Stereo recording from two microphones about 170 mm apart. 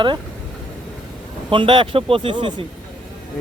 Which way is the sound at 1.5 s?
30° right (ahead or behind).